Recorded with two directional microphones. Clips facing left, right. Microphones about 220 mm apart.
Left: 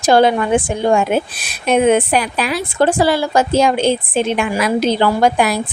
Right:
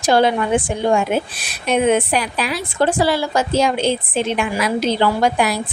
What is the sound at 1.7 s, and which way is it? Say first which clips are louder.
A woman's voice: left 3 dB; 50° left (ahead or behind).